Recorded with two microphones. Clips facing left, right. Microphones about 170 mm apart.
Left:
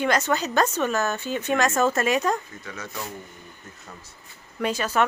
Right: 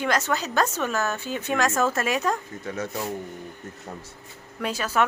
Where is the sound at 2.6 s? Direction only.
50° right (ahead or behind).